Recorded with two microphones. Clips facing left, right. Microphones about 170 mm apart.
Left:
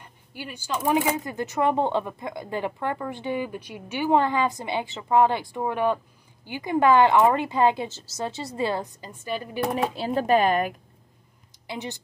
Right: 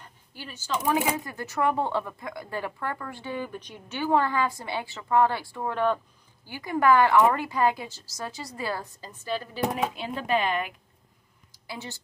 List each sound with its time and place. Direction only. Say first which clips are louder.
0.0 s speech: left 5 dB; 15° left (ahead or behind)
9.9 s speech: left 6 dB; 40° left (ahead or behind)
11.6 s speech: left 5 dB; 20° left (ahead or behind)